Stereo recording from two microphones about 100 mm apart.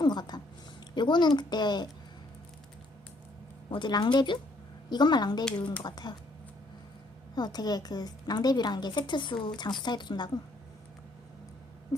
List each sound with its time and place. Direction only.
0.0 s a sound: 45° left (ahead or behind)
0.9 s a woman's voice: 50° left (ahead or behind)
3.7 s a woman's voice: 50° left (ahead or behind)
7.3 s a woman's voice: 45° left (ahead or behind)
11.9 s whimper: 30° left (ahead or behind)